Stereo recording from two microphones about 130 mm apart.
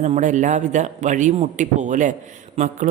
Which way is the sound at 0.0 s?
70° right (ahead or behind).